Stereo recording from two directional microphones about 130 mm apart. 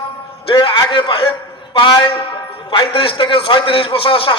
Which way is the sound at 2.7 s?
45° left (ahead or behind).